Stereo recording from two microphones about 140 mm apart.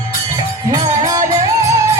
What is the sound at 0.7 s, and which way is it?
Music, 25° right (ahead or behind).